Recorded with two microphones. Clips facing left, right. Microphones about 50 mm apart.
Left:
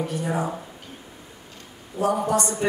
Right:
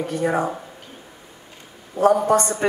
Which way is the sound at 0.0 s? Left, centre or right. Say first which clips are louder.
Right 4 dB; right.